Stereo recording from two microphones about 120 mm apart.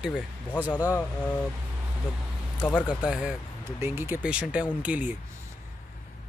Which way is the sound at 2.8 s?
10° right (ahead or behind).